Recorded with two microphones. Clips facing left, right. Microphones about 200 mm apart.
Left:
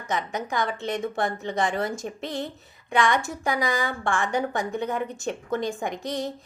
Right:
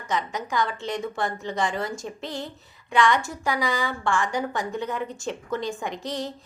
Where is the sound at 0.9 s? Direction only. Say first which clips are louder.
Left 1 dB; 20° left (ahead or behind).